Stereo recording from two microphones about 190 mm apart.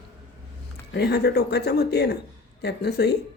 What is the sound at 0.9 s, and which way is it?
Speech, 60° left (ahead or behind).